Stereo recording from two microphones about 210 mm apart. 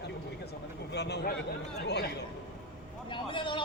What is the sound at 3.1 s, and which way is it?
Vehicle, 25° left (ahead or behind).